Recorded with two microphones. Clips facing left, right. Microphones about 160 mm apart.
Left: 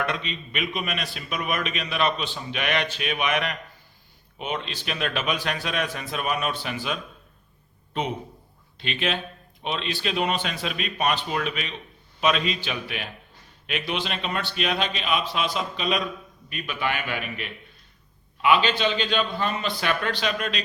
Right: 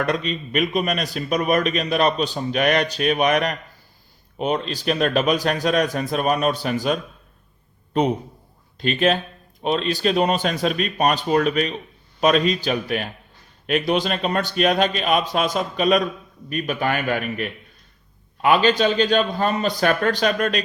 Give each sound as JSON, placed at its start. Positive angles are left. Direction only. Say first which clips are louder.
{"t": 0.0, "sound": "a man's voice", "louder": "right 6 dB", "side_deg": -40}